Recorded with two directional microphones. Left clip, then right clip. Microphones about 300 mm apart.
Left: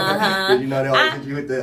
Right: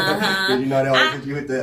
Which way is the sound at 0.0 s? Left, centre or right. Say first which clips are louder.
Left 1 dB; centre.